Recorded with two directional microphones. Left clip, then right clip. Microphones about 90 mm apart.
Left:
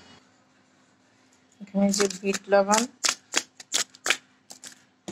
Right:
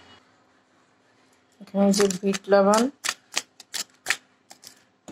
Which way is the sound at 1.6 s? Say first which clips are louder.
Right 4 dB; 30° right (ahead or behind).